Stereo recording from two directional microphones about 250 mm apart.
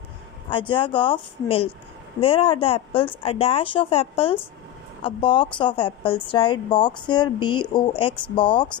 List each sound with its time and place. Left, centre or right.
0.5 s a woman's voice: centre